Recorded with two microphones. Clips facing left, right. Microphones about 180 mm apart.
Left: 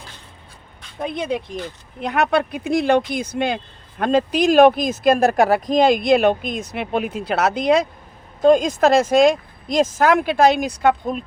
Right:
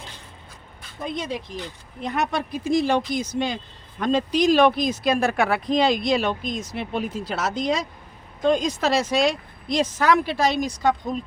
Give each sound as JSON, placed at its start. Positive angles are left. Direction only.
{"t": 1.0, "sound": "speech", "side_deg": 60}
{"t": 8.4, "sound": "speech", "side_deg": 45}